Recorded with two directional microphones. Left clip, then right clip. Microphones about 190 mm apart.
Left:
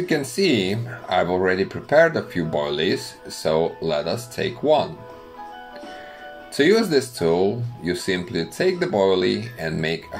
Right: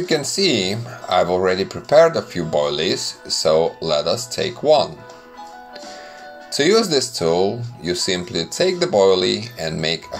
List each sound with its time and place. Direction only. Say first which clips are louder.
0.0 s speech: right 3 dB; 15° right (ahead or behind)
6.5 s speech: right 2 dB; 15° right (ahead or behind)